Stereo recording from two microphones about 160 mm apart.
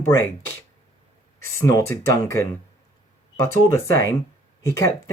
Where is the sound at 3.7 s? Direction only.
20° left (ahead or behind).